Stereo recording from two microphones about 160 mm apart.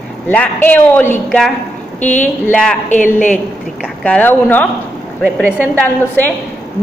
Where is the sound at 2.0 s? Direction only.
50° left (ahead or behind).